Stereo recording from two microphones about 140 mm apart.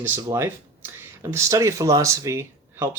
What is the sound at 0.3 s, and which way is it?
Speech, 20° right (ahead or behind).